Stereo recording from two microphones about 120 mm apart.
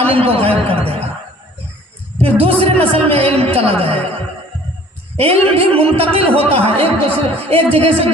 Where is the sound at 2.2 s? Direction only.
50° right (ahead or behind).